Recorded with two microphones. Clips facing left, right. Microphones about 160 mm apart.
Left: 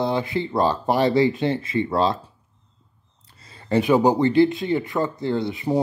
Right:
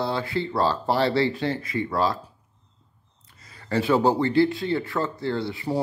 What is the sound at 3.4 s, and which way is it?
Speech, 25° left (ahead or behind).